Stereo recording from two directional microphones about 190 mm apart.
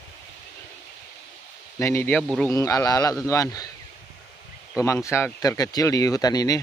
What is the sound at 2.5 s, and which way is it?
Speech, 15° left (ahead or behind).